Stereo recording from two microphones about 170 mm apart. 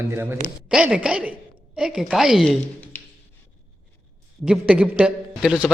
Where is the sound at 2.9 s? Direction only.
10° left (ahead or behind).